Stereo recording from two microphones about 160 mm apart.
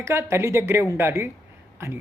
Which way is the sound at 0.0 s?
15° right (ahead or behind).